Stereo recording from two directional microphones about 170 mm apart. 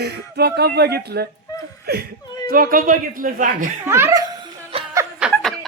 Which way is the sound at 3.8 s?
15° right (ahead or behind).